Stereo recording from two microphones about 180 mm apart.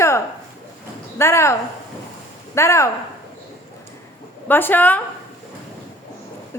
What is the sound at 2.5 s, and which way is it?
Speech, 15° left (ahead or behind).